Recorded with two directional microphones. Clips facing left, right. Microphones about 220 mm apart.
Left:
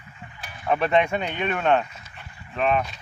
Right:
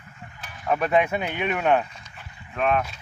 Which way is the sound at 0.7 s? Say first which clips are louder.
Even; 5° right (ahead or behind).